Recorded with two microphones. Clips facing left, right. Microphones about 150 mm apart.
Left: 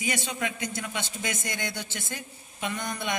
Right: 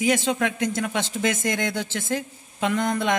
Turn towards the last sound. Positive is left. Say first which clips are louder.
# right 9 dB
turn(degrees=-90)